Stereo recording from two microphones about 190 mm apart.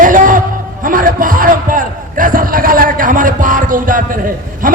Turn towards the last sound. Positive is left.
turn(degrees=-45)  # may be behind; listen again after turning